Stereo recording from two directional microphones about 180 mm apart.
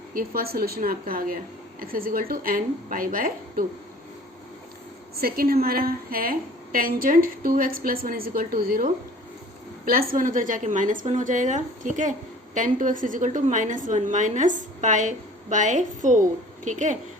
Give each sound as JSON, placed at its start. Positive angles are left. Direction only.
{"t": 0.1, "sound": "a woman's voice", "side_deg": -55}
{"t": 5.1, "sound": "a woman's voice", "side_deg": -55}